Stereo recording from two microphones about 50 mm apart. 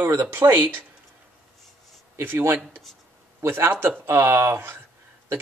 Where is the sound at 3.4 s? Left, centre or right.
Right.